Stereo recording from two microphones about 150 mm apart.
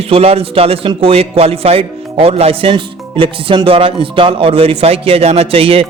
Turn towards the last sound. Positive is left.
turn(degrees=-40)  # may be behind; listen again after turning